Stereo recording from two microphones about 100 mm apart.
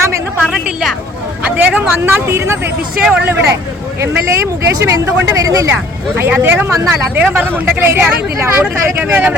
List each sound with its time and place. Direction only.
0.4 s a woman's voice: 5° right (ahead or behind)
1.5 s speech: 20° right (ahead or behind)
3.0 s speech: 5° right (ahead or behind)
3.2 s speech: 20° right (ahead or behind)
6.1 s speech: 20° right (ahead or behind)